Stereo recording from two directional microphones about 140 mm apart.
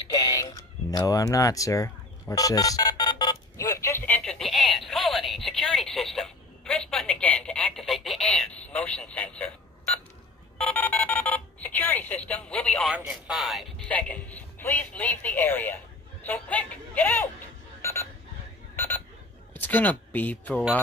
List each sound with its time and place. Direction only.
0.1 s a sound: 25° left (ahead or behind)
4.2 s a sound: 5° left (ahead or behind)
10.6 s telephone dialing: 10° left (ahead or behind)
12.9 s speech: centre (ahead or behind)
13.8 s speech: 10° left (ahead or behind)
17.8 s alarm clock: 20° left (ahead or behind)
19.5 s speech: 15° left (ahead or behind)